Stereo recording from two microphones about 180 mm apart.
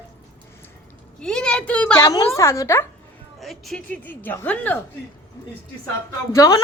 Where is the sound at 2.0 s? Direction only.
15° left (ahead or behind).